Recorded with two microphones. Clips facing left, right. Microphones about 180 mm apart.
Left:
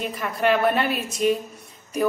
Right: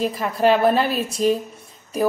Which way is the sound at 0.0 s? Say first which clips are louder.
Right 5 dB; 30° right (ahead or behind).